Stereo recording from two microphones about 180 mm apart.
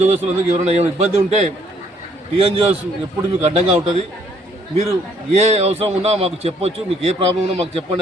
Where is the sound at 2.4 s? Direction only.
30° right (ahead or behind).